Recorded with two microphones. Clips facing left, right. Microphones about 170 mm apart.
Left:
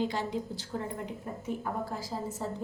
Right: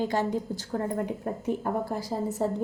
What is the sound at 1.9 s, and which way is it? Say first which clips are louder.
Speech: right 7 dB; 65° right (ahead or behind).